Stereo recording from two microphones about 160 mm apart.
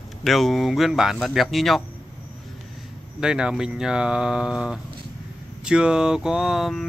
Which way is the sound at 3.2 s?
5° right (ahead or behind).